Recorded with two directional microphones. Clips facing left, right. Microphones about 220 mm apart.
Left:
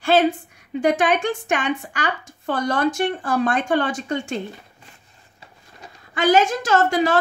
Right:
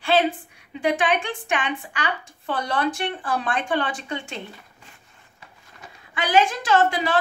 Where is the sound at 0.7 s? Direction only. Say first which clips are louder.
Left 4 dB; 45° left (ahead or behind).